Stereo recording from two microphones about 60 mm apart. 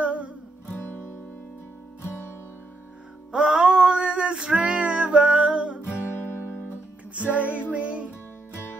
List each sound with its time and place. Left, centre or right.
0.0 s music: right
0.7 s music: left
2.0 s music: left
3.3 s music: centre
7.2 s music: right